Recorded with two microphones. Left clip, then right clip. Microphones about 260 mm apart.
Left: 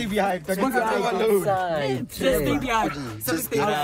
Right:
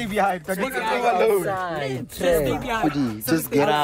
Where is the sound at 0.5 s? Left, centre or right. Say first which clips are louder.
Left 1 dB; centre.